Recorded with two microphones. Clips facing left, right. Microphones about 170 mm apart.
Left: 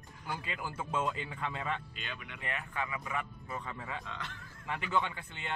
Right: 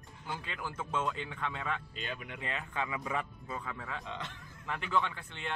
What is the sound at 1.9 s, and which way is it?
Speech, 40° right (ahead or behind).